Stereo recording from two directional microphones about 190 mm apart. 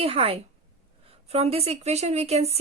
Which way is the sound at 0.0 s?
30° right (ahead or behind).